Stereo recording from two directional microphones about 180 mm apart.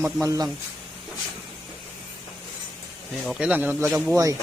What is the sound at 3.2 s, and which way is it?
Speech, centre (ahead or behind).